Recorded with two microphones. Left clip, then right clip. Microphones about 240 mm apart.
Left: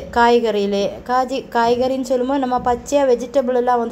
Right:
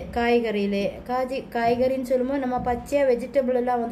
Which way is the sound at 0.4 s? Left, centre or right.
Left.